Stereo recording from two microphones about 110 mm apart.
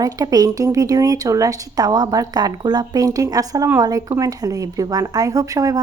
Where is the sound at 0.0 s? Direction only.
35° right (ahead or behind).